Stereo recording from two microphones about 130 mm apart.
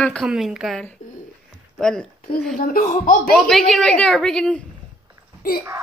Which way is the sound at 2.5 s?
90° left.